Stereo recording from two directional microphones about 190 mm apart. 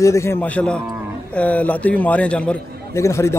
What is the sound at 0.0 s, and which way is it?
A man's voice, 15° left (ahead or behind).